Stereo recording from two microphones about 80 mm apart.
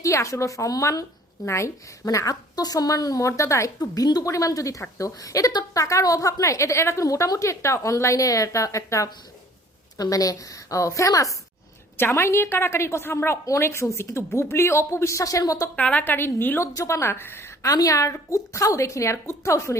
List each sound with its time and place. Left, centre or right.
0.0 s a woman's voice: left
1.5 s a woman's voice: left
2.0 s a woman's voice: left
3.8 s a woman's voice: left
11.9 s a woman's voice: left
15.7 s a woman's voice: centre
16.7 s a woman's voice: left
17.6 s a woman's voice: left